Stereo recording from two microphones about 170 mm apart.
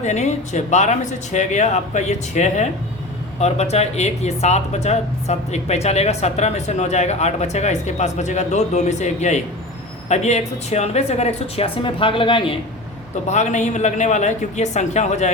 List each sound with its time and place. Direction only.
0.0 s speech: 45° left (ahead or behind)
13.2 s speech: 45° left (ahead or behind)